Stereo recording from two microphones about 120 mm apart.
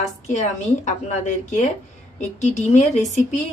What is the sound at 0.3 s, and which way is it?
A woman's voice, 80° left.